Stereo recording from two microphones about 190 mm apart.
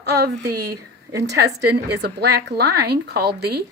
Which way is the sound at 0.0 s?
60° right (ahead or behind).